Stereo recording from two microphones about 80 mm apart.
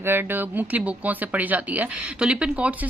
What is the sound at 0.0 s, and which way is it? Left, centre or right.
Speech, right.